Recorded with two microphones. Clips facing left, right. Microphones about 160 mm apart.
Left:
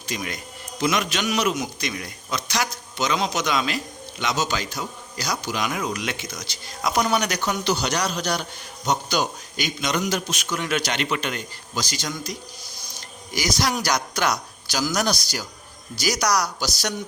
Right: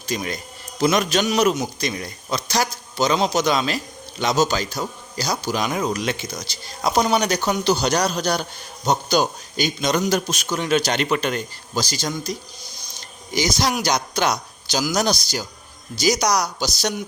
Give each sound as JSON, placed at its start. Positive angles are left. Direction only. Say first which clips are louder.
{"t": 0.0, "sound": "a man's voice", "louder": "right 4 dB", "side_deg": -35}